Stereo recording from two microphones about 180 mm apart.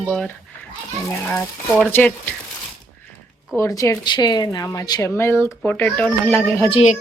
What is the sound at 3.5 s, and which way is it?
Speech, 15° left (ahead or behind).